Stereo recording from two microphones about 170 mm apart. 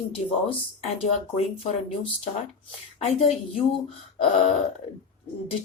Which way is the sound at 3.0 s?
40° left (ahead or behind).